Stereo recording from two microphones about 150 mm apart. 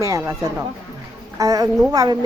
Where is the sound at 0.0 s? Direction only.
20° right (ahead or behind).